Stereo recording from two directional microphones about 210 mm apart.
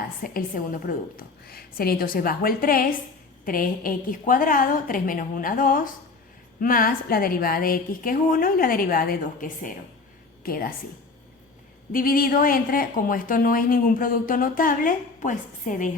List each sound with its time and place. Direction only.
0.2 s a woman's voice: 40° left (ahead or behind)
11.9 s speech: 40° left (ahead or behind)